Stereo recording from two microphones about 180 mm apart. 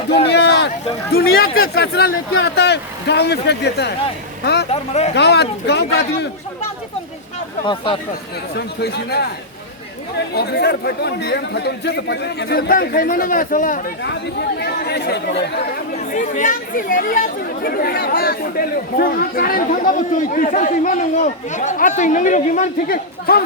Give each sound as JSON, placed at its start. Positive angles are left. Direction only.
{"t": 0.3, "sound": "a sound", "side_deg": 70}
{"t": 1.1, "sound": "speech", "side_deg": 60}
{"t": 4.7, "sound": "speech", "side_deg": 40}
{"t": 5.1, "sound": "speech", "side_deg": 70}
{"t": 8.8, "sound": "speech", "side_deg": 65}
{"t": 10.3, "sound": "speech", "side_deg": 65}
{"t": 14.6, "sound": "speech", "side_deg": 65}
{"t": 16.0, "sound": "speech", "side_deg": 45}